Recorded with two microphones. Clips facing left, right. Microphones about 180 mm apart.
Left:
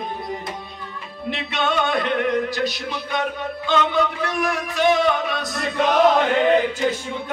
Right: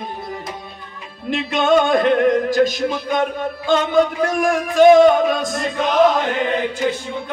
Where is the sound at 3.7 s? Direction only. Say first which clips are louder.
Right 5 dB; 45° right (ahead or behind).